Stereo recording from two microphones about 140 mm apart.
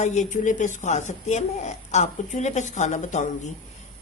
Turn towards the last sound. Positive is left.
turn(degrees=60)  # may be behind; listen again after turning